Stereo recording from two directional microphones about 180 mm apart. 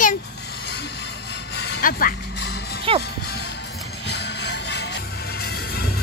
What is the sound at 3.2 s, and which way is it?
Music, 65° left (ahead or behind).